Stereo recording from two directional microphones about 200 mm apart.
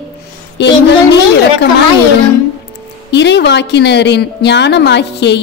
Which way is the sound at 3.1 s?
60° left (ahead or behind).